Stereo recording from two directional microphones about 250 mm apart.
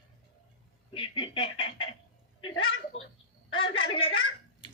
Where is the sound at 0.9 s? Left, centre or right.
Centre.